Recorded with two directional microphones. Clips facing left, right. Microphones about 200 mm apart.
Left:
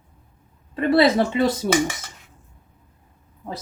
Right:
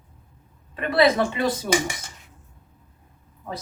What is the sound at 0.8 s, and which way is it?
Speech, 25° left (ahead or behind).